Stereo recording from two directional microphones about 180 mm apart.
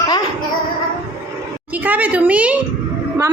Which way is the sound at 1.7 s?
10° right (ahead or behind).